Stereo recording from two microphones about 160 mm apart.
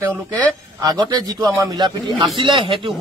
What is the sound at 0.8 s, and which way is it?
A man's voice, 25° right (ahead or behind).